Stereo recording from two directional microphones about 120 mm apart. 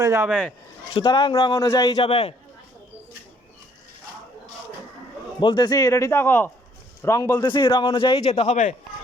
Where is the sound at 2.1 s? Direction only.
50° left (ahead or behind).